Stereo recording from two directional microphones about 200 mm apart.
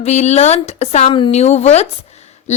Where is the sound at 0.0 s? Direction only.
35° left (ahead or behind).